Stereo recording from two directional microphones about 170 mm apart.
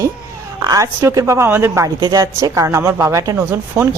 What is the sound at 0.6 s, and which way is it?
A woman's voice, 20° right (ahead or behind).